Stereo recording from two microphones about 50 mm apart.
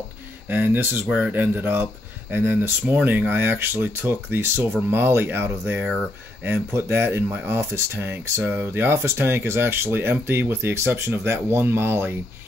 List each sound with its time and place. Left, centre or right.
0.5 s speech: right
7.4 s speech: right
8.5 s speech: right